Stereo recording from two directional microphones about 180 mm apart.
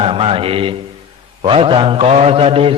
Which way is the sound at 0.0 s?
30° right (ahead or behind).